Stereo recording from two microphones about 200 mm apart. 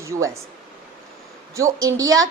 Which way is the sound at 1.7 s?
20° right (ahead or behind).